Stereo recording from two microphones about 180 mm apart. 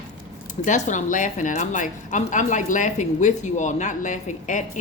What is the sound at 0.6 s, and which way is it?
A woman's voice, 45° left (ahead or behind).